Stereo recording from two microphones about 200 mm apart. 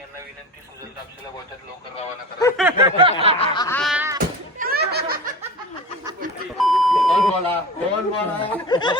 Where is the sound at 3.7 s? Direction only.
5° left (ahead or behind).